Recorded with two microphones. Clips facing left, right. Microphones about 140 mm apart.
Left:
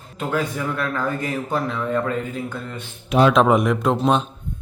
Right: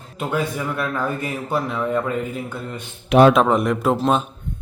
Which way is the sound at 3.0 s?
65° right (ahead or behind).